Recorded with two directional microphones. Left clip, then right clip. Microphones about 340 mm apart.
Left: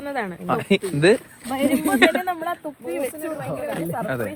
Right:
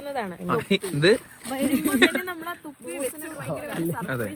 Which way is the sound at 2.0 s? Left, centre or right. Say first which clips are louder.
Left 3 dB; centre.